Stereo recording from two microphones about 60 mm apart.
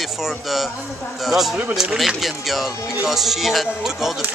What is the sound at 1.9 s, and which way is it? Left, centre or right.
Speech, centre.